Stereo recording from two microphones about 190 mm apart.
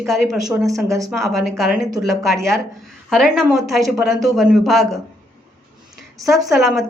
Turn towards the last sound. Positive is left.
turn(degrees=0)  # may be behind; listen again after turning